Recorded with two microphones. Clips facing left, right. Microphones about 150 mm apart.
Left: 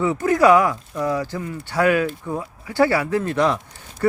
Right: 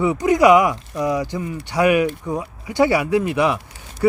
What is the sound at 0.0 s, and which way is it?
Speech, 15° right (ahead or behind).